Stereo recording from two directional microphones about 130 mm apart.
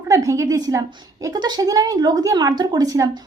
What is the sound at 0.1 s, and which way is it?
A woman's voice, 25° right (ahead or behind).